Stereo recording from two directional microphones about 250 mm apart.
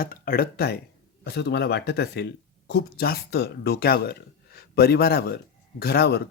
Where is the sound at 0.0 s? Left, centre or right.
Left.